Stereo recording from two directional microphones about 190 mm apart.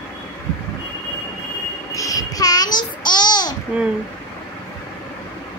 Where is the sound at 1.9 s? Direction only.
20° left (ahead or behind).